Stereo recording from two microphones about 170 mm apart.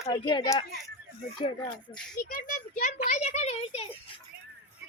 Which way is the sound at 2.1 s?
50° left (ahead or behind).